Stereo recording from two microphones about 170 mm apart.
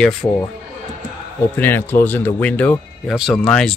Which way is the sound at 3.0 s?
Centre (ahead or behind).